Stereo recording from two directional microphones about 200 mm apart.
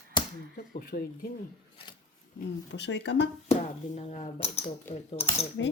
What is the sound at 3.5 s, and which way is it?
Speech, 35° left (ahead or behind).